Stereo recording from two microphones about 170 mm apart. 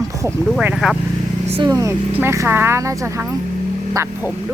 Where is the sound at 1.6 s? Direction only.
20° right (ahead or behind).